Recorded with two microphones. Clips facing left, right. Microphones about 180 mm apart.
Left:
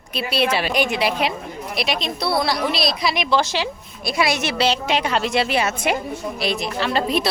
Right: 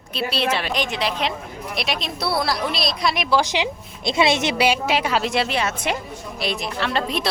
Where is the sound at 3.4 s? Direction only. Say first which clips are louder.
Even; 15° right (ahead or behind).